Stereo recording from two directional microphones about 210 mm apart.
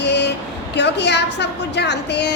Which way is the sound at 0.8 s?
55° left (ahead or behind).